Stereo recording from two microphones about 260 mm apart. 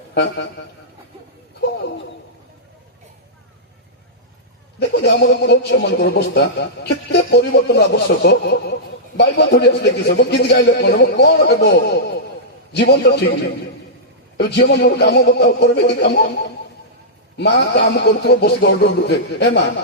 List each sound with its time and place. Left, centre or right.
4.8 s a man's voice: left
14.3 s a man's voice: left
17.3 s a man's voice: left